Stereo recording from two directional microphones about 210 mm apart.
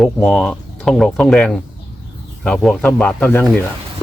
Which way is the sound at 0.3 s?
5° left (ahead or behind).